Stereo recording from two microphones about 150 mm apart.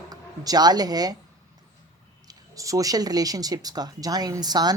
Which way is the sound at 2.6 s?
20° right (ahead or behind).